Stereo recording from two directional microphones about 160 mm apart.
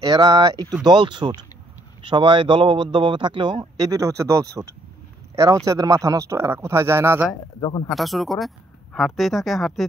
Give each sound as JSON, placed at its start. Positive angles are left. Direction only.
{"t": 0.0, "sound": "speech", "side_deg": -25}
{"t": 7.6, "sound": "speech", "side_deg": 25}
{"t": 7.9, "sound": "speech", "side_deg": 0}